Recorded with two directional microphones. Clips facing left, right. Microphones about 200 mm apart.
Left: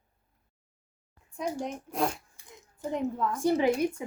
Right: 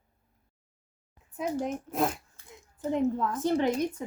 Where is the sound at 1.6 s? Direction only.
5° right (ahead or behind).